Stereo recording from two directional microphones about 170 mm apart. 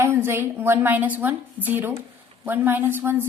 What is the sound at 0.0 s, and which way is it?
A woman's voice, 15° right (ahead or behind).